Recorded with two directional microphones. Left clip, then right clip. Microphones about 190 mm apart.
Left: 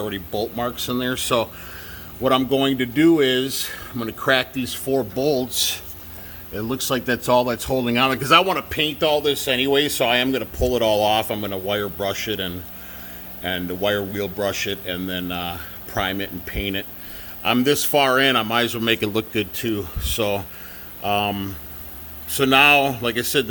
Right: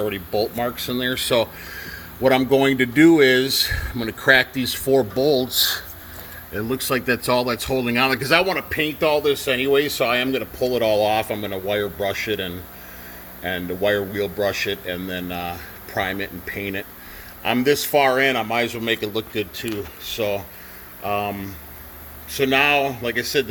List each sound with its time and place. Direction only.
0.5 s speech: 5° left (ahead or behind)
2.2 s speech: 15° right (ahead or behind)
4.7 s speech: 20° right (ahead or behind)
5.1 s speech: centre (ahead or behind)
6.5 s speech: 5° right (ahead or behind); by 23.5 s 25° left (ahead or behind)